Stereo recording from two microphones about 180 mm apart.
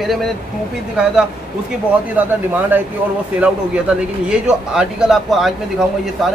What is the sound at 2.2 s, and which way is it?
A man's voice, 10° right (ahead or behind).